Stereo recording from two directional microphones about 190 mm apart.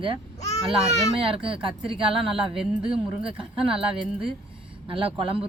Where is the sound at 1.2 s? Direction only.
30° right (ahead or behind).